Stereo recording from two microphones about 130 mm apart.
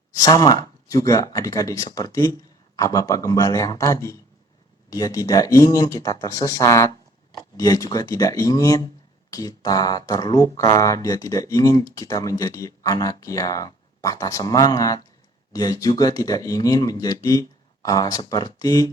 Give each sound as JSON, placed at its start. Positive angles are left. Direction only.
{"t": 0.1, "sound": "speech", "side_deg": 30}